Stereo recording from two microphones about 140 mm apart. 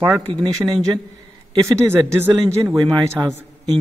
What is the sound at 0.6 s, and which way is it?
Speech, 25° right (ahead or behind).